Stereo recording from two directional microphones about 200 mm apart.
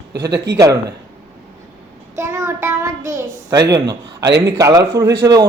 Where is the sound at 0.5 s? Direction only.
20° right (ahead or behind).